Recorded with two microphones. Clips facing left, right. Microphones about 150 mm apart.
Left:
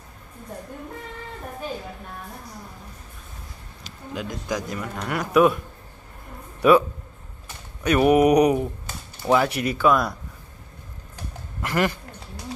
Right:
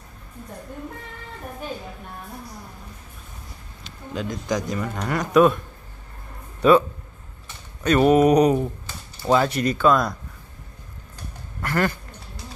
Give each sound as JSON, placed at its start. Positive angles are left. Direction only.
{"t": 4.1, "sound": "a man's voice", "side_deg": 10}
{"t": 7.8, "sound": "a man's voice", "side_deg": 10}
{"t": 11.6, "sound": "a sound", "side_deg": 15}